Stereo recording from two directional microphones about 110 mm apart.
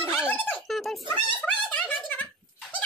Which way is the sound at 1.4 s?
10° left (ahead or behind).